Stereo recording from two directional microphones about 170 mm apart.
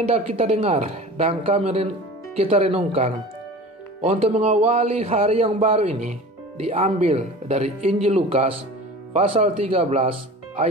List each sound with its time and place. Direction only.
0.1 s a man's voice: 35° right (ahead or behind)